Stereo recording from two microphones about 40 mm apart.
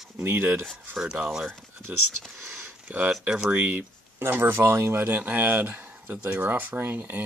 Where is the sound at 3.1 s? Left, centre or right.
Centre.